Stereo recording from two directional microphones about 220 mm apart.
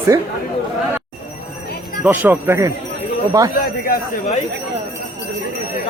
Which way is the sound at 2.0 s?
10° right (ahead or behind).